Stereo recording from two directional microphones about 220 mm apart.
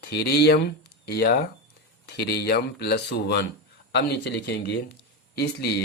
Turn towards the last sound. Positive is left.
turn(degrees=50)  # may be behind; listen again after turning